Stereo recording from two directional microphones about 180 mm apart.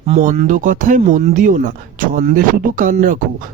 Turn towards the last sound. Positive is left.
turn(degrees=-45)  # may be behind; listen again after turning